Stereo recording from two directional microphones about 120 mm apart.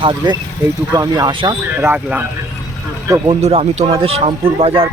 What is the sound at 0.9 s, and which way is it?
Speech, 35° right (ahead or behind).